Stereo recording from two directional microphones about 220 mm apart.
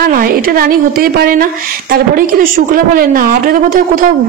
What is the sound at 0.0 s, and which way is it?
A woman's voice, 40° right (ahead or behind).